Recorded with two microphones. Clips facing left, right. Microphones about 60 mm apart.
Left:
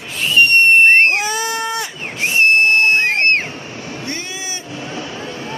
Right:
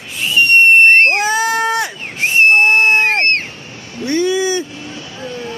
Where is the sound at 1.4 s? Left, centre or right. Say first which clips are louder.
Right 6 dB; right.